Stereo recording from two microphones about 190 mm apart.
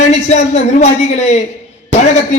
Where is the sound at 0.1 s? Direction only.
35° left (ahead or behind).